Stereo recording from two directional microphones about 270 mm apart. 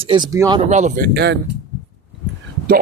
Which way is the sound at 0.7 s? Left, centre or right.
Right.